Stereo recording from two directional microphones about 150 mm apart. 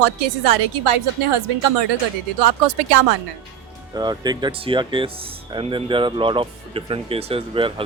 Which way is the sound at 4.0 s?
30° right (ahead or behind).